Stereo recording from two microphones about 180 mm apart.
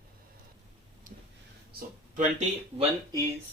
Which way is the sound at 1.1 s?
50° right (ahead or behind).